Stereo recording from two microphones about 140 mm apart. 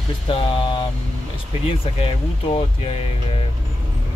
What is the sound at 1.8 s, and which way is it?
Speech, 40° left (ahead or behind).